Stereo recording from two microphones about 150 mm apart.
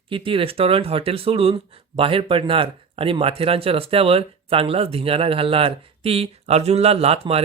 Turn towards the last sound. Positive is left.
turn(degrees=-40)  # may be behind; listen again after turning